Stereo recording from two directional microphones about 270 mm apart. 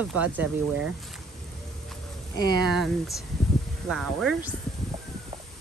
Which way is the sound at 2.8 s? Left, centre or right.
Centre.